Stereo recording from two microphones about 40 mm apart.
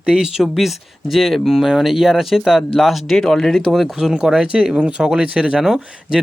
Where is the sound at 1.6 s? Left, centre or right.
Centre.